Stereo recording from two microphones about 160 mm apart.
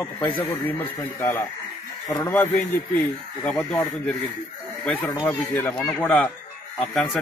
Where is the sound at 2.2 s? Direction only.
15° left (ahead or behind).